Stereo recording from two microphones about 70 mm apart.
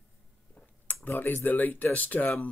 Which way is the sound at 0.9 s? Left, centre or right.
Left.